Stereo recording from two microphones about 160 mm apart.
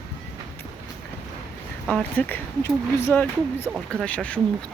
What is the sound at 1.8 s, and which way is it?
A woman's voice, 5° left (ahead or behind).